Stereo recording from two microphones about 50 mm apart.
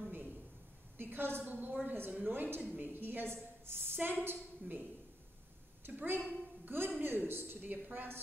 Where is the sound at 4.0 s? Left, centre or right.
Right.